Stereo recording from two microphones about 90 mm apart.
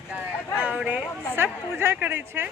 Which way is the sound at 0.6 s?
15° right (ahead or behind).